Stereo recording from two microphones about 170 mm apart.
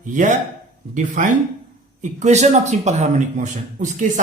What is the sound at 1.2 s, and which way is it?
A man's voice, 50° right (ahead or behind).